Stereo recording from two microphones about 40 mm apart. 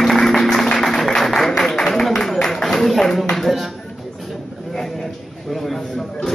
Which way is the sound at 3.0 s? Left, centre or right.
Centre.